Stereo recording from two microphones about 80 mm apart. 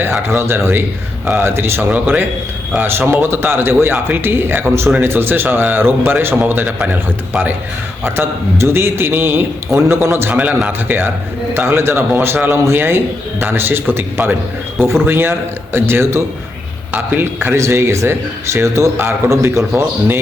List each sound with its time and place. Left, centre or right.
0.0 s a man's voice: right
1.9 s a man's voice: centre
10.3 s a man's voice: centre
10.7 s a man's voice: right
17.6 s a man's voice: right